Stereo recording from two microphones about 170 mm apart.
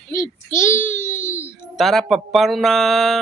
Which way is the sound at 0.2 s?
15° left (ahead or behind).